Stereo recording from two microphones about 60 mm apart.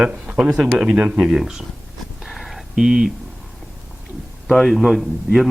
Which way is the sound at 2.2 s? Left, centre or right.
Centre.